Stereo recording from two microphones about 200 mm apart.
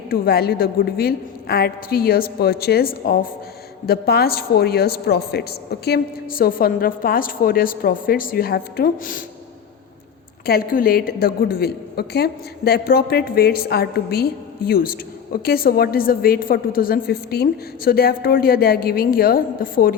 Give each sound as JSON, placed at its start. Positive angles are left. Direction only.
{"t": 0.1, "sound": "a woman's voice", "side_deg": 50}
{"t": 10.4, "sound": "a woman's voice", "side_deg": 50}